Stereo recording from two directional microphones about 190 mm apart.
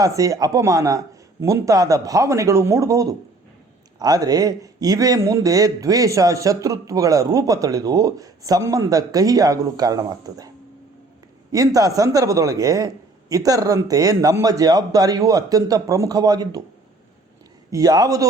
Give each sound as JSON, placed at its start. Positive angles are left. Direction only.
{"t": 0.0, "sound": "a man's voice", "side_deg": -15}
{"t": 11.5, "sound": "speech", "side_deg": -20}
{"t": 17.7, "sound": "a man's voice", "side_deg": -20}